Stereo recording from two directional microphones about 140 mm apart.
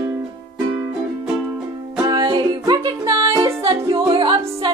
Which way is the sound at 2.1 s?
30° right (ahead or behind).